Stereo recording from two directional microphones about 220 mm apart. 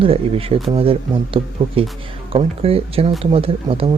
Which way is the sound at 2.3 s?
25° right (ahead or behind).